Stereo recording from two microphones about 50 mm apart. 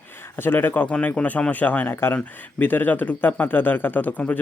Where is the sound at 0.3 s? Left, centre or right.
Left.